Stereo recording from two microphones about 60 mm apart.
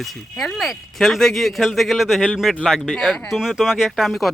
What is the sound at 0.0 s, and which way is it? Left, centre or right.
Speech, centre.